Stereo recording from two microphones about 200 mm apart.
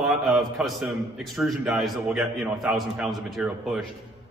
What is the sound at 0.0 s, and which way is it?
A man's voice, centre (ahead or behind).